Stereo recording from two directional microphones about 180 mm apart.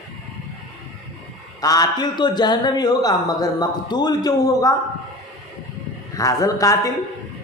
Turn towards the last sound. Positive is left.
turn(degrees=20)  # may be behind; listen again after turning